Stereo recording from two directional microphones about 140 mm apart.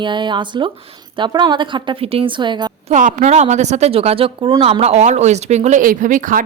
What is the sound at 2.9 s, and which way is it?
Speech, 60° right (ahead or behind).